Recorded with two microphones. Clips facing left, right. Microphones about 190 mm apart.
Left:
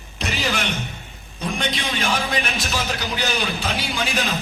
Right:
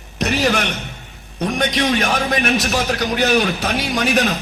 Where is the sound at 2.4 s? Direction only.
65° right (ahead or behind).